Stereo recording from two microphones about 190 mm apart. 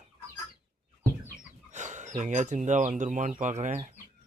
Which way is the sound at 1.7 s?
40° right (ahead or behind).